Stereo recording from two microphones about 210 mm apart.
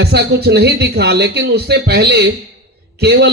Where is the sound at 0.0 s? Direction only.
50° right (ahead or behind).